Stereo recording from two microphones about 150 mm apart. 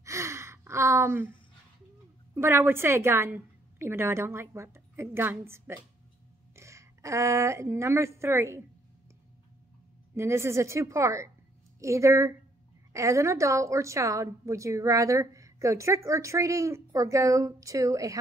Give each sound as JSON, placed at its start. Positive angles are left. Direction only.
{"t": 0.0, "sound": "gasp", "side_deg": -20}
{"t": 2.3, "sound": "a woman's voice", "side_deg": -15}
{"t": 10.1, "sound": "a woman's voice", "side_deg": -15}